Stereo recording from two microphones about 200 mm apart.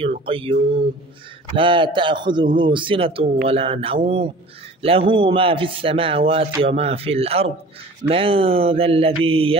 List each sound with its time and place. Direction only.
0.2 s a man's voice: 25° right (ahead or behind)